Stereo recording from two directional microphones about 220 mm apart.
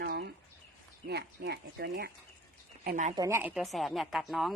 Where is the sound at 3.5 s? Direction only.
Centre (ahead or behind).